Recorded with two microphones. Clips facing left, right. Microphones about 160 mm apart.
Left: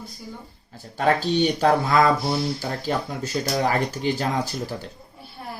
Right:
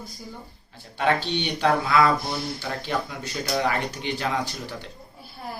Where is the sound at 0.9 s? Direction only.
40° left (ahead or behind).